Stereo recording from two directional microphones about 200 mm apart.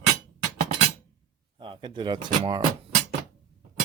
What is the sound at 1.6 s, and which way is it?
Speech, 25° right (ahead or behind).